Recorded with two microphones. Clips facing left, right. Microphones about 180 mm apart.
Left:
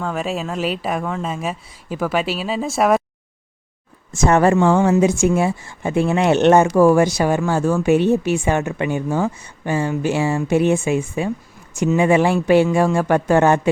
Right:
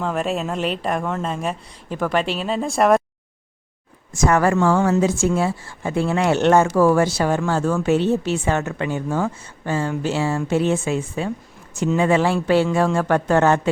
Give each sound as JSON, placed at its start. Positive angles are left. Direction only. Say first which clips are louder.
{"t": 0.0, "sound": "speech", "louder": "right 1 dB", "side_deg": 0}
{"t": 4.1, "sound": "a woman's voice", "louder": "left 3 dB", "side_deg": 25}